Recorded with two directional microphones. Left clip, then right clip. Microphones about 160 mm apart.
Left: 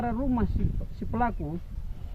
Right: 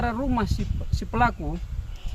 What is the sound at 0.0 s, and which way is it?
Speech, 30° right (ahead or behind).